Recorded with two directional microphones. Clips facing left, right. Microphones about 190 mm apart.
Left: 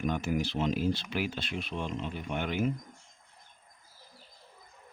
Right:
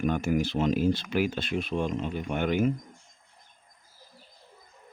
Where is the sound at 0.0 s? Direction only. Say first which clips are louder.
Right 4 dB; 55° right (ahead or behind).